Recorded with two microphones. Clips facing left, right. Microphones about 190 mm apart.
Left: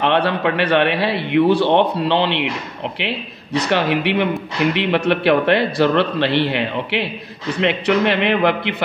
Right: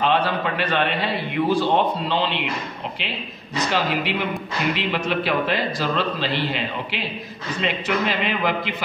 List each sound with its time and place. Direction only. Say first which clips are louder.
0.0 s a man's voice: left 4 dB; 65° left (ahead or behind)